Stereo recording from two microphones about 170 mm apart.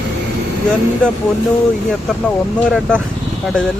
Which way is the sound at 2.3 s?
5° left (ahead or behind).